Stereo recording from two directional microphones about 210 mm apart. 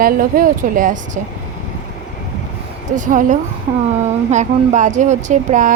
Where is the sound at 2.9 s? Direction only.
40° right (ahead or behind).